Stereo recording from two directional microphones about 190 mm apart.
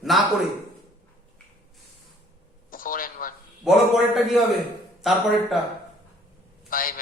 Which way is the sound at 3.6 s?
Centre (ahead or behind).